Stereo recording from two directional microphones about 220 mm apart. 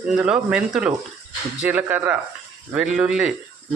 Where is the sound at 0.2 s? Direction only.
5° right (ahead or behind).